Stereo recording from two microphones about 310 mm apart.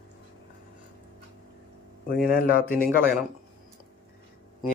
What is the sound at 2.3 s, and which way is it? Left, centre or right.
Speech, left.